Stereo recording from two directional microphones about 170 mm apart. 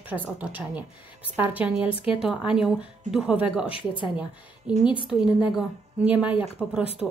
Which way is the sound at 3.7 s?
30° left (ahead or behind).